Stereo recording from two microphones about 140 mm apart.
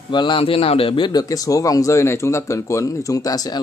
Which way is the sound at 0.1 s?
35° left (ahead or behind).